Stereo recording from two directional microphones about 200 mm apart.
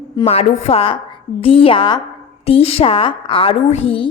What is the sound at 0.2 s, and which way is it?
A woman's voice, 30° left (ahead or behind).